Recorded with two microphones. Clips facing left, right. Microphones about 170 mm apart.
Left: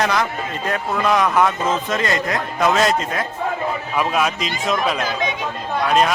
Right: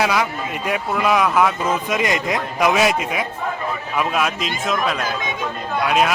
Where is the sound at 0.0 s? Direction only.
10° right (ahead or behind).